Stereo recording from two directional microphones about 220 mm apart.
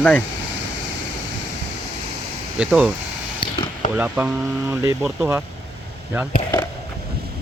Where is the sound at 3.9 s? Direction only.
10° right (ahead or behind).